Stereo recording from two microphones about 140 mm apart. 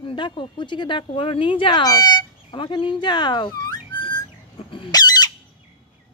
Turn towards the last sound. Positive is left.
turn(degrees=30)  # may be behind; listen again after turning